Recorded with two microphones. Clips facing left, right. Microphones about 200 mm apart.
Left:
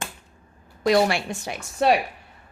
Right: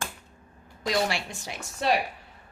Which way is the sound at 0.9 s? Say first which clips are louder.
Left 8 dB; 60° left (ahead or behind).